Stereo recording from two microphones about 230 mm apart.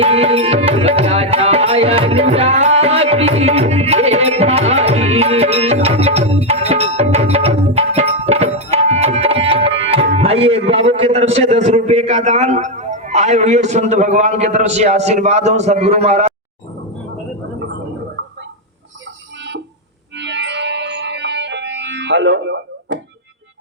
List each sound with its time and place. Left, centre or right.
0.0 s tabla: right
20.1 s music: right